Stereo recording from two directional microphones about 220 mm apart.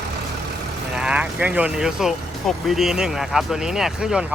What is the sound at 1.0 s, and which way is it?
Speech, 5° right (ahead or behind).